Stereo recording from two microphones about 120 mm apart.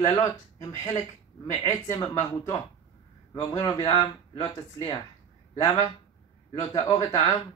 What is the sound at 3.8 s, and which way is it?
Speech, 45° left (ahead or behind).